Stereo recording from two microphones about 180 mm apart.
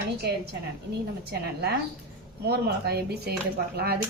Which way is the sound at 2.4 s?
60° right (ahead or behind).